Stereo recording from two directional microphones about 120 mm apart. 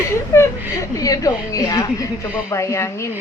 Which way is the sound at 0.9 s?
30° left (ahead or behind).